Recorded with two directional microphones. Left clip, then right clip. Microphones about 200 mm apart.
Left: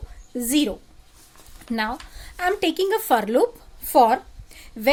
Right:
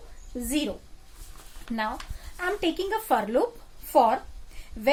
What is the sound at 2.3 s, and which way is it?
A woman's voice, 55° left (ahead or behind).